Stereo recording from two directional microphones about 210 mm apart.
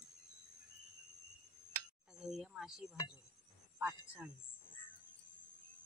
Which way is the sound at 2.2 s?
Centre (ahead or behind).